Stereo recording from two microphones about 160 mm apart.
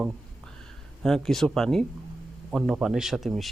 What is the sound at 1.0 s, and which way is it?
A man's voice, centre (ahead or behind).